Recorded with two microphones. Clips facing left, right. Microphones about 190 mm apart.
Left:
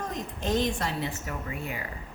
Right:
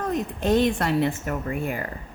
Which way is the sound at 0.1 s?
60° right (ahead or behind).